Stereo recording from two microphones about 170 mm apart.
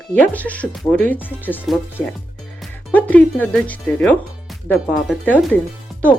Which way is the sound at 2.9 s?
10° left (ahead or behind).